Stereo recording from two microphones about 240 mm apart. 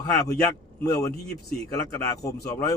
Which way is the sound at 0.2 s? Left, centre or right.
Centre.